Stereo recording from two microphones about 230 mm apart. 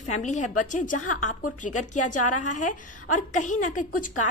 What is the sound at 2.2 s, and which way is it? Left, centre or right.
Speech, left.